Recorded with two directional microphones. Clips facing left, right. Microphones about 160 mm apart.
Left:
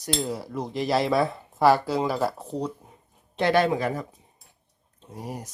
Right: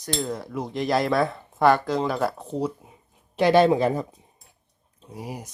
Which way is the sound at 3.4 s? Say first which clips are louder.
Right 4 dB; 20° right (ahead or behind).